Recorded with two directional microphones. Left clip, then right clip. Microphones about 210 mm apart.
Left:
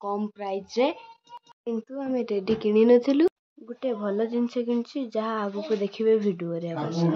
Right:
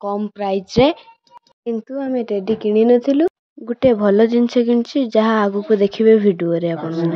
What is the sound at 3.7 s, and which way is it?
Speech, 40° right (ahead or behind).